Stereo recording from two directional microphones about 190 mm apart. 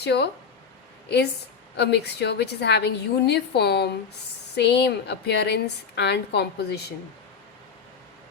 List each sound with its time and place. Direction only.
0.0 s a woman's voice: 60° left (ahead or behind)